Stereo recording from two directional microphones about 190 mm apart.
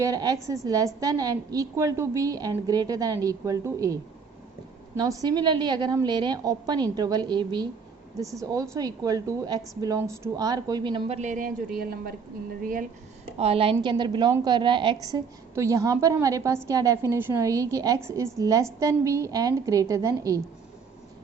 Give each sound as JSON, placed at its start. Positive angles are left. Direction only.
{"t": 0.0, "sound": "a woman's voice", "side_deg": -20}
{"t": 4.9, "sound": "a woman's voice", "side_deg": -20}
{"t": 11.2, "sound": "speech", "side_deg": -45}
{"t": 13.2, "sound": "a woman's voice", "side_deg": -30}